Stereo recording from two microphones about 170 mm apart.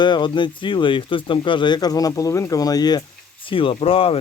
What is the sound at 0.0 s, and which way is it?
Speech, 25° left (ahead or behind).